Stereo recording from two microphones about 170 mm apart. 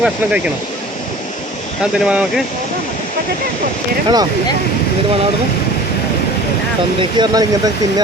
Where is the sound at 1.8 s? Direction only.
5° right (ahead or behind).